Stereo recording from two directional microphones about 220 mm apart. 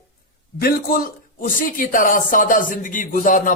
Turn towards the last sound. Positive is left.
turn(degrees=35)  # may be behind; listen again after turning